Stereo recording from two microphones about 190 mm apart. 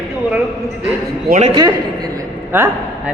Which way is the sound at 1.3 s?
35° right (ahead or behind).